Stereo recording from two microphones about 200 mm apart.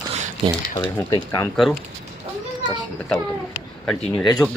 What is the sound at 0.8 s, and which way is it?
Speech, 15° left (ahead or behind).